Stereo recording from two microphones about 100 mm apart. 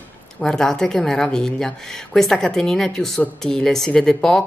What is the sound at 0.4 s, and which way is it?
Speech, 5° left (ahead or behind).